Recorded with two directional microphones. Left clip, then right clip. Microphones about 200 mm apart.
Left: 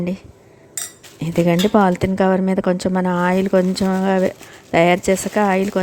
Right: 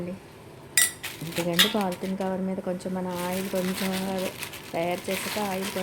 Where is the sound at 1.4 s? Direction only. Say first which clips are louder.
Left 8 dB; 45° left (ahead or behind).